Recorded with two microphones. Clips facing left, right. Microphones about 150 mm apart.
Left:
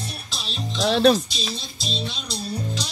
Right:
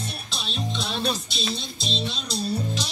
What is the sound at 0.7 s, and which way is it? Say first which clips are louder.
Music: left 12 dB; 90° left.